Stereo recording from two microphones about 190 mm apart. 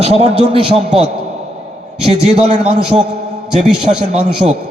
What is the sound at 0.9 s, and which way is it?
Speech, 5° right (ahead or behind).